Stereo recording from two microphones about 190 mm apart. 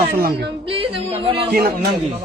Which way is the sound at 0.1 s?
55° right (ahead or behind).